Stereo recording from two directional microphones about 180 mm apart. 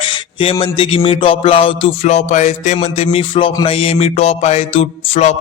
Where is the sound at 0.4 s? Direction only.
30° left (ahead or behind).